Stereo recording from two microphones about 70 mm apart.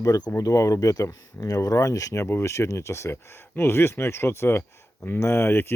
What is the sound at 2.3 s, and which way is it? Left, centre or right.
Speech, left.